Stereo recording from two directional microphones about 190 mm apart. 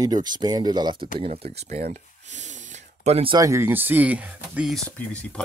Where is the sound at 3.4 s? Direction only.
15° right (ahead or behind).